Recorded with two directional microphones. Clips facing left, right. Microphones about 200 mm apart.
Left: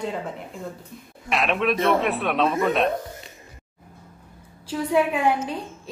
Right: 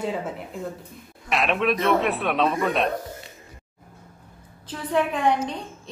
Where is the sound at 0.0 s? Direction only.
5° right (ahead or behind).